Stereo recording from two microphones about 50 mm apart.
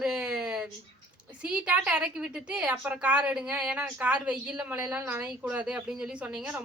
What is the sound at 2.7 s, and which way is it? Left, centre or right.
Speech, right.